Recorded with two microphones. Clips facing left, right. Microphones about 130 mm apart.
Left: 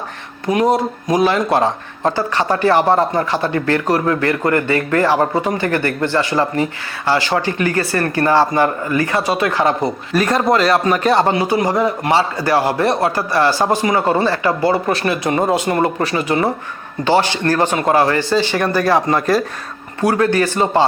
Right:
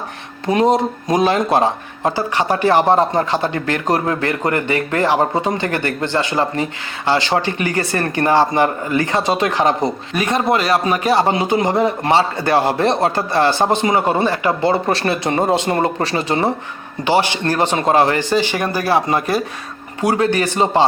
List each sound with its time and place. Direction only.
0.4 s speech: 25° right (ahead or behind)
10.2 s speech: centre (ahead or behind)
11.3 s speech: 20° right (ahead or behind)
17.0 s speech: 15° right (ahead or behind)
20.0 s speech: 20° right (ahead or behind)